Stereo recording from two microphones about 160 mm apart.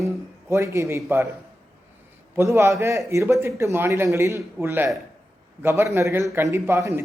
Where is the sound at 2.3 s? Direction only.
15° right (ahead or behind).